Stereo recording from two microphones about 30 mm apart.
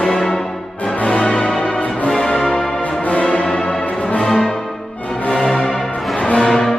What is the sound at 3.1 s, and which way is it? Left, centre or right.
Music, left.